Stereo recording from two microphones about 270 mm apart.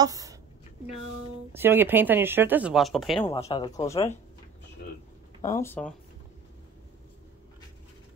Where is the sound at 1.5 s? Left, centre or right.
Centre.